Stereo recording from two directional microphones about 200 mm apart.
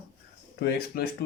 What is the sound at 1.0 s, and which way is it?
Speech, 50° left (ahead or behind).